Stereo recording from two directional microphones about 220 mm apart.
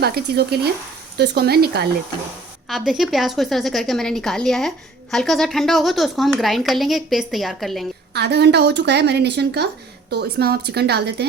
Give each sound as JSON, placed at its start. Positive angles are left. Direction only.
{"t": 0.0, "sound": "a woman's voice", "side_deg": -45}
{"t": 2.6, "sound": "a woman's voice", "side_deg": 0}
{"t": 8.1, "sound": "a woman's voice", "side_deg": -50}